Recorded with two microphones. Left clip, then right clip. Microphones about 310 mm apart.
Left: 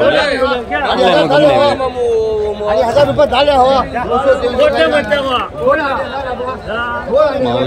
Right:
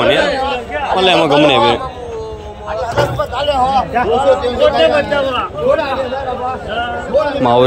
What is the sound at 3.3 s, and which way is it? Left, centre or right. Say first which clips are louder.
Speech: left 1 dB; left.